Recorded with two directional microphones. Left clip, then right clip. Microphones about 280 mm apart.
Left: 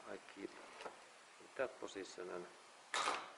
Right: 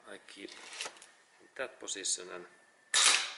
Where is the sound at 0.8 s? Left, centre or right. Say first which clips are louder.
Right 9 dB; centre.